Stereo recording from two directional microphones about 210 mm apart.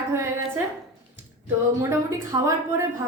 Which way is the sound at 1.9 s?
15° right (ahead or behind).